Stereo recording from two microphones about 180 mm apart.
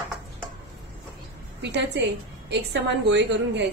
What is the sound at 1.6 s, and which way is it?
A woman's voice, 70° right (ahead or behind).